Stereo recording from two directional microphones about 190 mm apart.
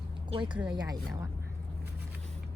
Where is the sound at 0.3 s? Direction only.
25° right (ahead or behind).